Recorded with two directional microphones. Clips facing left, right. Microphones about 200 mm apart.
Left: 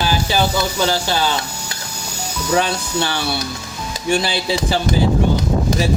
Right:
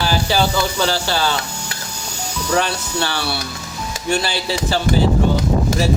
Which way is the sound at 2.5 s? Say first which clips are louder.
Left 2 dB; 15° left (ahead or behind).